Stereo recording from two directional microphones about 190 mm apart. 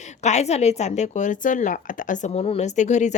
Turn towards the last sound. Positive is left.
turn(degrees=40)  # may be behind; listen again after turning